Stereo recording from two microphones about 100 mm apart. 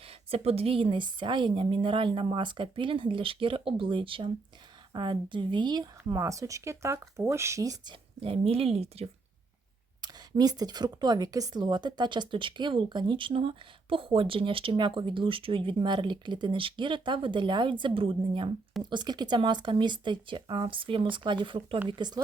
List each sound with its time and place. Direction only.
0.0 s a woman's voice: 75° right (ahead or behind); by 7.9 s 35° right (ahead or behind)
8.2 s a woman's voice: 70° right (ahead or behind)
10.0 s speech: 40° right (ahead or behind); by 18.5 s 60° right (ahead or behind)
18.8 s speech: 45° right (ahead or behind)